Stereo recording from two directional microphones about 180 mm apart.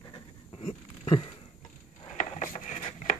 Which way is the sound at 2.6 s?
45° left (ahead or behind).